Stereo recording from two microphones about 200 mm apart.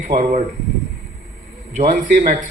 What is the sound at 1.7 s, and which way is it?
Speech, 40° right (ahead or behind).